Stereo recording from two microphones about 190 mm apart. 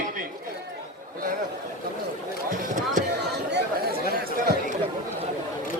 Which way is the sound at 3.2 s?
60° right (ahead or behind).